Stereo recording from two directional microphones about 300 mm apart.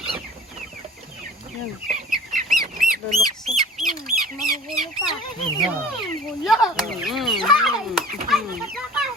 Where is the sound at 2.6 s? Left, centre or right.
Right.